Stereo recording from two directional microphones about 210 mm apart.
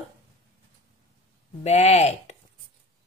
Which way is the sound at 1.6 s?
30° left (ahead or behind).